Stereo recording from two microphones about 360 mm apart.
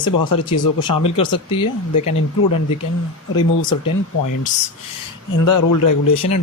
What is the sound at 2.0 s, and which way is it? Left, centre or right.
Speech, left.